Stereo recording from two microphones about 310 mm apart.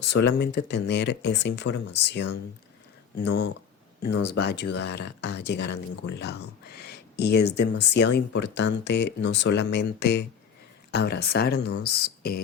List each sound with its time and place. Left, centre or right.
0.1 s speech: left